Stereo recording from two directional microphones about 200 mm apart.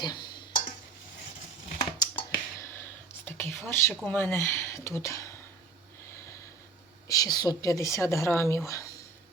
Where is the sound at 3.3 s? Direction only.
10° left (ahead or behind).